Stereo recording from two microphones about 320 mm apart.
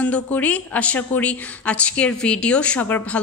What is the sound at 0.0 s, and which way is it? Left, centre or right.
A woman's voice, centre.